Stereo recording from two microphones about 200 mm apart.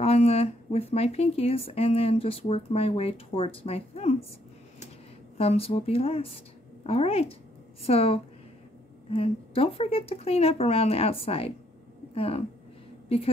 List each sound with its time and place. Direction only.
0.0 s speech: 30° left (ahead or behind)
5.4 s speech: 30° left (ahead or behind)